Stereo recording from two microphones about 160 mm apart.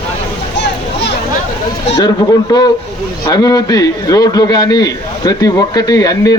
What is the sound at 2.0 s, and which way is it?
A man's voice, 25° left (ahead or behind).